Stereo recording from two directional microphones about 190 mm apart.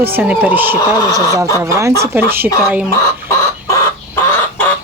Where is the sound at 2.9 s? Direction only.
15° left (ahead or behind).